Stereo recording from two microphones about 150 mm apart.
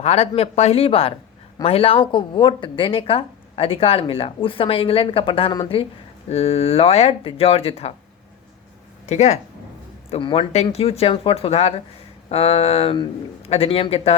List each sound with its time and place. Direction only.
0.0 s speech: 45° left (ahead or behind)
9.0 s speech: 50° left (ahead or behind)
10.1 s speech: 35° left (ahead or behind)